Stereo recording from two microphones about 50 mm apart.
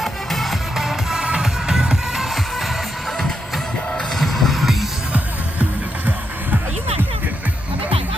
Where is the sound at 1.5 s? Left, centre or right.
Centre.